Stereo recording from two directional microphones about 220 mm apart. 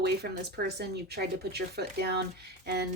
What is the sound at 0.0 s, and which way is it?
Speech, 50° right (ahead or behind).